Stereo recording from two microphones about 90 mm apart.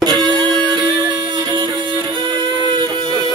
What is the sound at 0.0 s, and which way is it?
Music, 55° right (ahead or behind).